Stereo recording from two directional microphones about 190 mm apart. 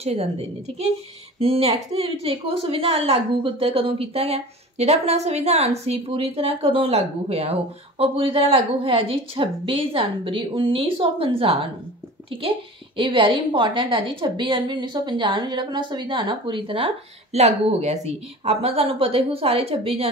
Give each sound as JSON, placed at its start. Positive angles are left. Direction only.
{"t": 0.0, "sound": "a woman's voice", "side_deg": -30}